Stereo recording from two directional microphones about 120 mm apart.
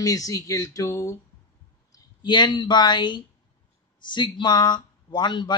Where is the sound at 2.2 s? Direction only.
40° left (ahead or behind).